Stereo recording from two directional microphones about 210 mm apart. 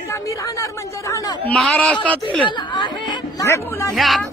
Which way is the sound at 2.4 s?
20° left (ahead or behind).